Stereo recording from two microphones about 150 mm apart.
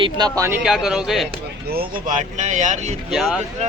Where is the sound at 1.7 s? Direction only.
90° right.